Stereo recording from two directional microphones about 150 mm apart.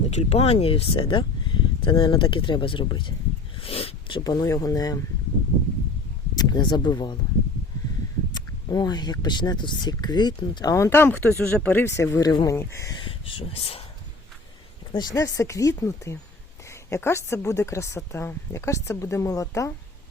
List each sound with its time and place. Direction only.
0.1 s speech: 45° left (ahead or behind)
3.6 s a sound: 40° left (ahead or behind)
4.2 s speech: 25° left (ahead or behind)
6.5 s speech: 30° left (ahead or behind)
8.3 s speech: 25° left (ahead or behind)
13.1 s speech: 40° left (ahead or behind)
14.9 s speech: 25° left (ahead or behind)